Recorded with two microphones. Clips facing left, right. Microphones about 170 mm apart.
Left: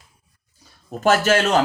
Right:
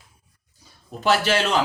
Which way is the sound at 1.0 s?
45° left (ahead or behind).